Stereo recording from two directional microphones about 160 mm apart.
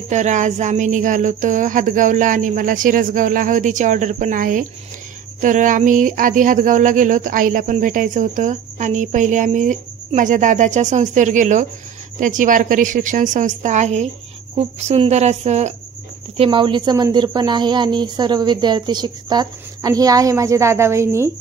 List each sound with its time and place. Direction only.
0.1 s speech: 50° right (ahead or behind)
16.3 s a woman's voice: 30° right (ahead or behind)